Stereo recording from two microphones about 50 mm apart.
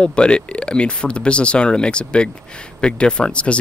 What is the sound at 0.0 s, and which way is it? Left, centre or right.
Speech, centre.